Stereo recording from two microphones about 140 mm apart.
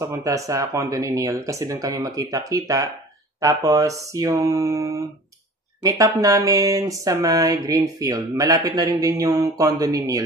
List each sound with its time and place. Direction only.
0.0 s speech: 20° right (ahead or behind)